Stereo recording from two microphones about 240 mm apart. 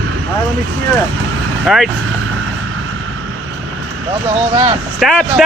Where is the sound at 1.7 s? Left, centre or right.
Centre.